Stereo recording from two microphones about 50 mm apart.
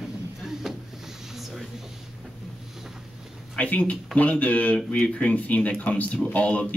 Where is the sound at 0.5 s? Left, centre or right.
Centre.